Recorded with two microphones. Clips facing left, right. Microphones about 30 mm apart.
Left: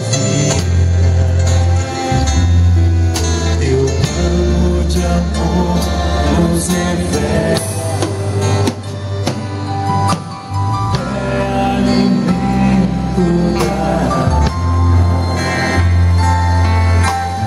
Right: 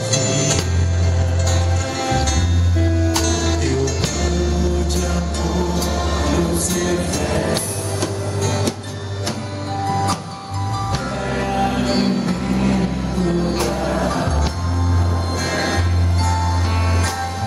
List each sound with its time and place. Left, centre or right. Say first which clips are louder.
0.1 s music: left 4 dB; centre
2.0 s music: left 3 dB; centre; by 8.6 s left
9.8 s music: left 4 dB; left
11.2 s music: left 4 dB; centre
15.3 s music: left 4 dB; centre